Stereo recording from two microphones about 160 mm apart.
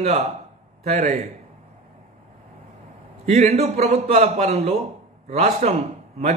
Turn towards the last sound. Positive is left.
turn(degrees=-45)  # may be behind; listen again after turning